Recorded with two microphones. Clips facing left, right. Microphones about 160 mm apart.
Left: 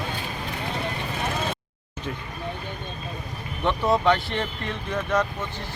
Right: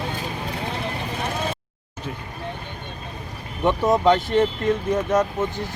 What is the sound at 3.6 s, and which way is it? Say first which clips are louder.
Speech: right 4 dB; 20° right (ahead or behind).